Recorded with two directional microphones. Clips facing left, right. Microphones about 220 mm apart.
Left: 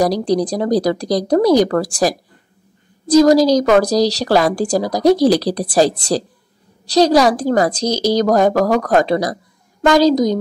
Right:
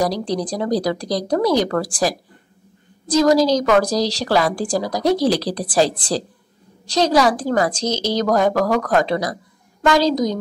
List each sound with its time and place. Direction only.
0.0 s a woman's voice: 40° left (ahead or behind)